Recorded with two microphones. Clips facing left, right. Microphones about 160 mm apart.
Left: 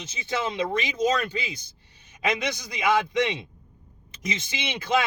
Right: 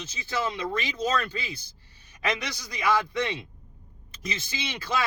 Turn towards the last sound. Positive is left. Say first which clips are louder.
# left 4 dB
turn(degrees=20)  # may be behind; listen again after turning